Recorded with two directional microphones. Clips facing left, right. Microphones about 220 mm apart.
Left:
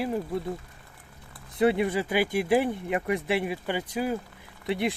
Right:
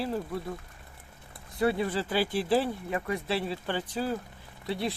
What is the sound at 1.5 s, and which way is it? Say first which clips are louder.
Speech: left 4 dB; 20° left (ahead or behind).